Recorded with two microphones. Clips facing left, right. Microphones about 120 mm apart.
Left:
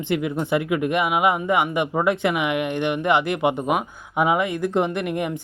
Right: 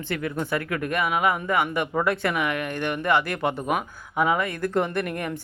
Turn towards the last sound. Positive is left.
turn(degrees=15)  # may be behind; listen again after turning